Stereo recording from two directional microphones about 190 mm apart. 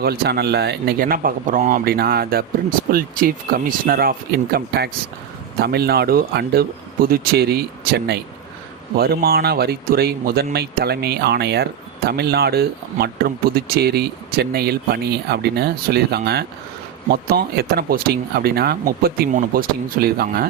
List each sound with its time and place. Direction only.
0.0 s speech: 55° right (ahead or behind)